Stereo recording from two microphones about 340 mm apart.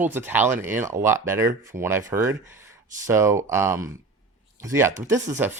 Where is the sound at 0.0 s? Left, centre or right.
Centre.